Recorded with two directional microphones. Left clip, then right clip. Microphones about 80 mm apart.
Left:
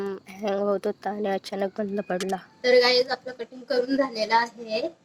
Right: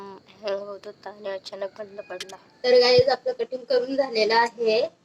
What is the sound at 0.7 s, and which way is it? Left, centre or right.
Speech, left.